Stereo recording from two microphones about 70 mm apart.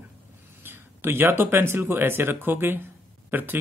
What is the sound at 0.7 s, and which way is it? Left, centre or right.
Speech, right.